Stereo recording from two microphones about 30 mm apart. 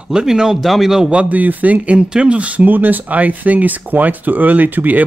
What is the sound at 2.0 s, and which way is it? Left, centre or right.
Speech, right.